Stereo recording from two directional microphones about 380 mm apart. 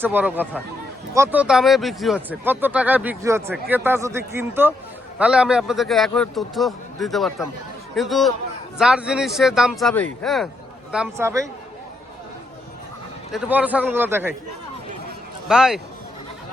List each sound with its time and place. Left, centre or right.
0.0 s speech: centre
13.3 s speech: centre
15.4 s speech: centre